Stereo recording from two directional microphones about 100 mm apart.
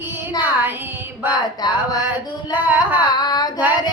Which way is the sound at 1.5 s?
40° left (ahead or behind).